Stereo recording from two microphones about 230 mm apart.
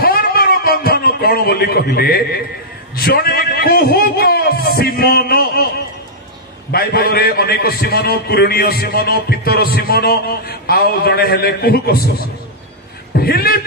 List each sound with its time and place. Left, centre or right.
0.0 s a sound: left
2.9 s a man's voice: left
6.7 s a man's voice: left